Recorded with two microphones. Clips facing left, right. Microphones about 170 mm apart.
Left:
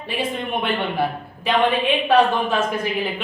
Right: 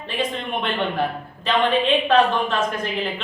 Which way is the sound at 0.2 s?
10° left (ahead or behind).